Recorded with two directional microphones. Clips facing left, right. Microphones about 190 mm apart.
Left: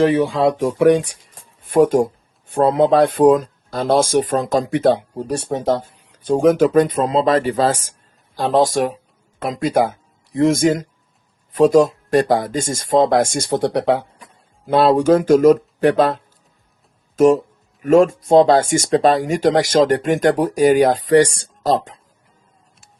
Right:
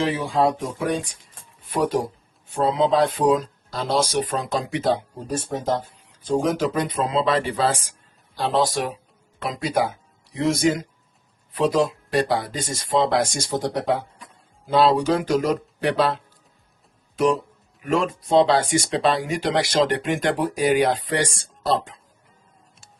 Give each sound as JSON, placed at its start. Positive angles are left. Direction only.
{"t": 0.0, "sound": "speech", "side_deg": 60}
{"t": 1.6, "sound": "speech", "side_deg": 50}
{"t": 14.7, "sound": "speech", "side_deg": 55}